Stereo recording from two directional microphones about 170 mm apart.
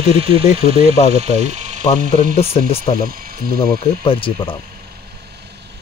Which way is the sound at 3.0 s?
60° right (ahead or behind).